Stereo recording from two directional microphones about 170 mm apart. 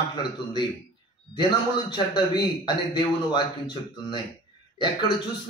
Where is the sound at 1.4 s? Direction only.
25° left (ahead or behind).